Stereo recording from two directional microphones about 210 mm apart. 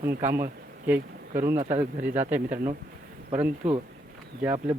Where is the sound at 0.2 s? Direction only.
10° right (ahead or behind).